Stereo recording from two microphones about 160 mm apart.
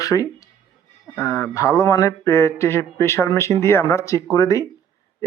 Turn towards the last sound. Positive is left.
turn(degrees=20)  # may be behind; listen again after turning